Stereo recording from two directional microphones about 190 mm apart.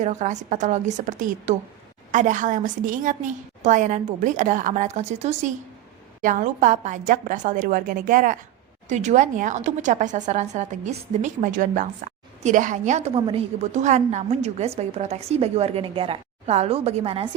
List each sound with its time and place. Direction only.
0.0 s a woman's voice: 40° right (ahead or behind)